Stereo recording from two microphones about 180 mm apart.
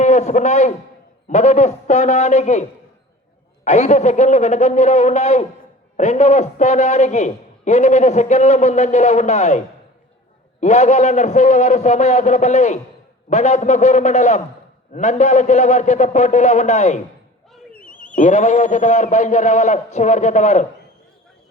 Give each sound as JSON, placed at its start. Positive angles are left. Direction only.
{"t": 0.0, "sound": "a man's voice", "side_deg": 40}
{"t": 17.5, "sound": "a sound", "side_deg": 5}
{"t": 18.1, "sound": "a man's voice", "side_deg": 45}